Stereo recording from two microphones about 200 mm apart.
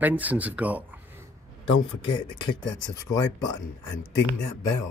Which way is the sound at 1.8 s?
25° left (ahead or behind).